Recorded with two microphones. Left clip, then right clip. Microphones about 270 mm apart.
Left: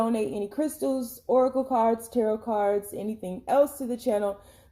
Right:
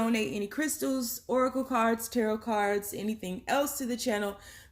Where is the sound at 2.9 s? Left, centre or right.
Right.